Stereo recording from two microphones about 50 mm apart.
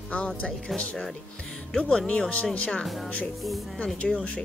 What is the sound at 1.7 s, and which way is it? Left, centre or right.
Speech, centre.